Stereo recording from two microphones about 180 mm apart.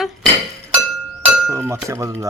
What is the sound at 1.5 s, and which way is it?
Speech, 15° right (ahead or behind).